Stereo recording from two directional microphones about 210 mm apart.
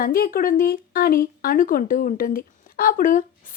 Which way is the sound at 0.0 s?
45° left (ahead or behind).